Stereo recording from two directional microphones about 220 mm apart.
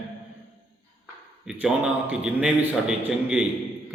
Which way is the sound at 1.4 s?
5° right (ahead or behind).